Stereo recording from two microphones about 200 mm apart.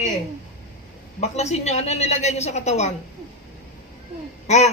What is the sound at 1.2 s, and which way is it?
A woman's voice, 35° left (ahead or behind).